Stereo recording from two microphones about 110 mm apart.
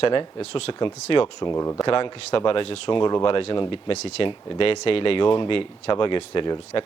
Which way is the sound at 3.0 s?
40° left (ahead or behind).